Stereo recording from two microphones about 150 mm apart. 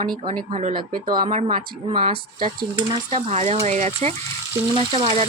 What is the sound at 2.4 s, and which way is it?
Stir, 35° right (ahead or behind).